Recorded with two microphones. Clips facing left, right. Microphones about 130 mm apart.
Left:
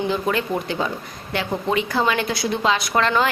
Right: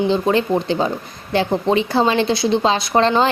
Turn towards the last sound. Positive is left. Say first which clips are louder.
# right 4 dB
turn(degrees=-30)  # may be behind; listen again after turning